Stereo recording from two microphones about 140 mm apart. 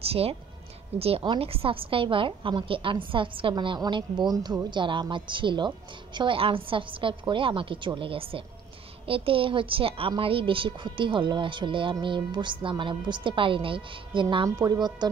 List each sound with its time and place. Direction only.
0.0 s a woman's voice: 45° right (ahead or behind); by 14.9 s 30° right (ahead or behind)